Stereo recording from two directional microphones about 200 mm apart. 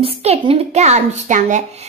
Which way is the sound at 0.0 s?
30° right (ahead or behind).